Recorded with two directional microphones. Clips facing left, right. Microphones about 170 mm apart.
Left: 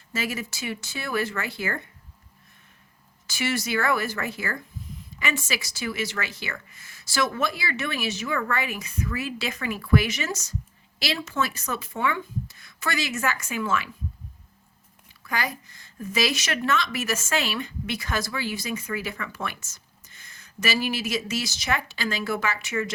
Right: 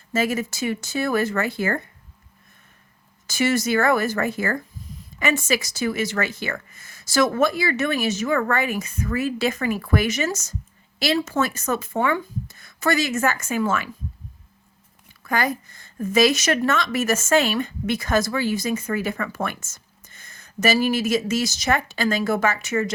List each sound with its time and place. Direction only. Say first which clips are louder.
0.1 s a woman's voice: right 8 dB; 45° right (ahead or behind)
3.2 s a woman's voice: right 7 dB; 45° right (ahead or behind)
15.2 s a woman's voice: right 6 dB; 50° right (ahead or behind)